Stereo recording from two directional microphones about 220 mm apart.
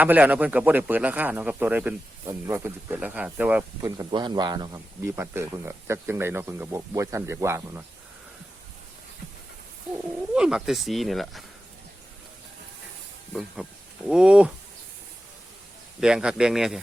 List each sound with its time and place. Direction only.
0.0 s speech: 5° right (ahead or behind)
9.9 s speech: 5° right (ahead or behind)
14.1 s speech: 5° right (ahead or behind)
16.0 s speech: 5° right (ahead or behind)